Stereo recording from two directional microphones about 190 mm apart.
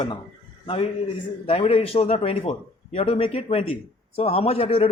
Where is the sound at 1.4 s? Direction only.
30° left (ahead or behind).